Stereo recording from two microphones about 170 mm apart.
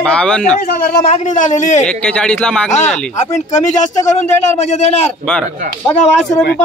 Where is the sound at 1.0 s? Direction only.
45° left (ahead or behind).